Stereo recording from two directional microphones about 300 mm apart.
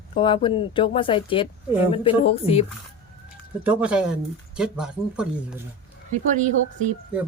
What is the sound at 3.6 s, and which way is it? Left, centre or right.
Speech, centre.